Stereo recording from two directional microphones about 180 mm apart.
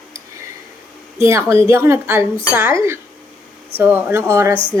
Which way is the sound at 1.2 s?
15° right (ahead or behind).